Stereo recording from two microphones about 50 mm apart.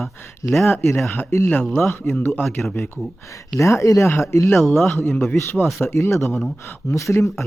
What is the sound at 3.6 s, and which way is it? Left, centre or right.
Speech, left.